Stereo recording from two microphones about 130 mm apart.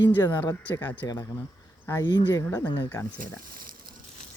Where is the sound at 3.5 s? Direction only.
90° right.